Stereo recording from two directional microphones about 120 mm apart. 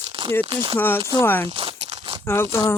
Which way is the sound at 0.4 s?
50° right (ahead or behind).